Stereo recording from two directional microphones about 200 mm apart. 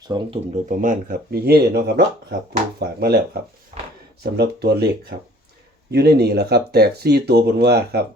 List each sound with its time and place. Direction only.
0.0 s speech: 20° right (ahead or behind)
0.5 s speech: 40° right (ahead or behind)